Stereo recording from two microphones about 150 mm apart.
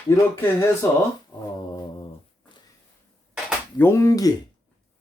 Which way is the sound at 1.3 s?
25° left (ahead or behind).